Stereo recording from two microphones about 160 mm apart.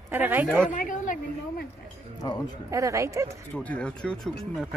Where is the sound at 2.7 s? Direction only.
20° right (ahead or behind).